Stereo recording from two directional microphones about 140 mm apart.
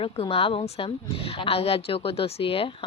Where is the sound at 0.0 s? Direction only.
45° left (ahead or behind).